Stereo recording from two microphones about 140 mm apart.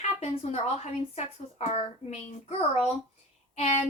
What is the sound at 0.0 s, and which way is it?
A woman's voice, 50° left (ahead or behind).